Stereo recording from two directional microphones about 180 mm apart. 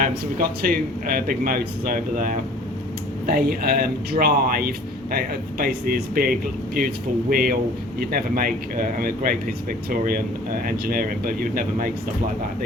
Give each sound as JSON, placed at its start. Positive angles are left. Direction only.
{"t": 0.0, "sound": "a man's voice", "side_deg": -50}